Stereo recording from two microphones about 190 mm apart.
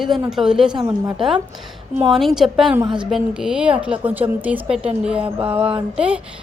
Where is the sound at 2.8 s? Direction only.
25° right (ahead or behind).